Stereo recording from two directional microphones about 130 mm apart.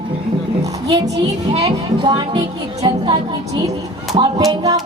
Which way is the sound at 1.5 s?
50° right (ahead or behind).